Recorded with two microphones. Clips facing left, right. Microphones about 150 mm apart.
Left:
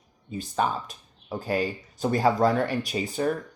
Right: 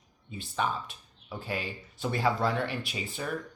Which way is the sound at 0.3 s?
40° left (ahead or behind).